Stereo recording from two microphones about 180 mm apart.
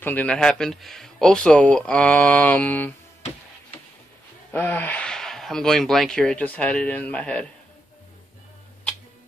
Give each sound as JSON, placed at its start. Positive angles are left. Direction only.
{"t": 0.0, "sound": "speech", "side_deg": 10}
{"t": 3.2, "sound": "music", "side_deg": 40}
{"t": 4.5, "sound": "speech", "side_deg": 10}